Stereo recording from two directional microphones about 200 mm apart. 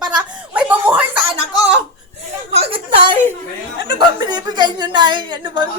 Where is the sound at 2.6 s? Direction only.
25° right (ahead or behind).